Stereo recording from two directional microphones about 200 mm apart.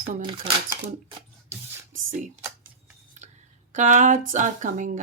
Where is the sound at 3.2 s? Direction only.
35° right (ahead or behind).